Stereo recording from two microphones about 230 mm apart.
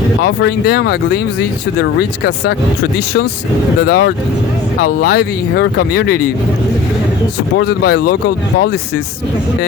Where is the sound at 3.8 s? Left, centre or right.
Left.